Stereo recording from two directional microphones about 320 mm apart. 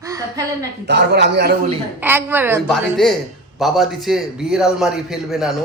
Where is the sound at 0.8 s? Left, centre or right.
Right.